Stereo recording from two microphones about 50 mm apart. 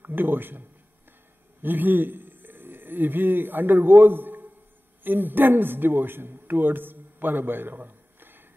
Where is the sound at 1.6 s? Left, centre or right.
Right.